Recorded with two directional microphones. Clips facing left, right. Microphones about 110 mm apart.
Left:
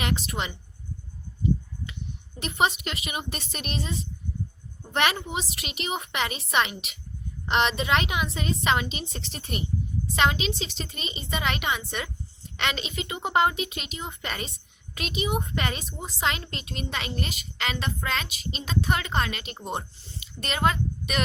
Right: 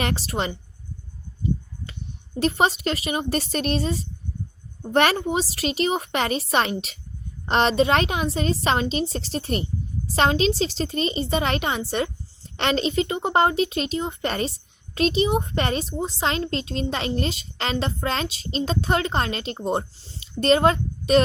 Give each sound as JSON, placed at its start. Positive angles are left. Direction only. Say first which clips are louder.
{"t": 0.0, "sound": "a child's voice", "louder": "right 4 dB", "side_deg": -35}
{"t": 1.9, "sound": "a child's voice", "louder": "right 2 dB", "side_deg": -40}